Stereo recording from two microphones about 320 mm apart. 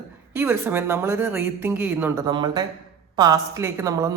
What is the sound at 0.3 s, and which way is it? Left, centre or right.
A woman's voice, centre.